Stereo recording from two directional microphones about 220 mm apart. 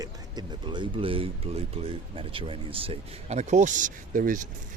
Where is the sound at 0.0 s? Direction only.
20° right (ahead or behind).